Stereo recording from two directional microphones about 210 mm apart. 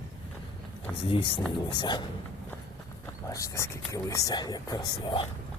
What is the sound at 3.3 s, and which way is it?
Speech, 15° left (ahead or behind).